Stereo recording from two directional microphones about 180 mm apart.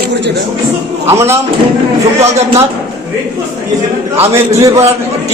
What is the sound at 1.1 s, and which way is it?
Speech, 15° right (ahead or behind).